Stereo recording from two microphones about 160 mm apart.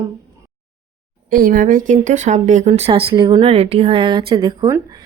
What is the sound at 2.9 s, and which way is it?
A woman's voice, 30° right (ahead or behind).